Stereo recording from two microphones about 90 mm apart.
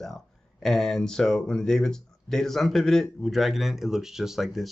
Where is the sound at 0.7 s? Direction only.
5° left (ahead or behind).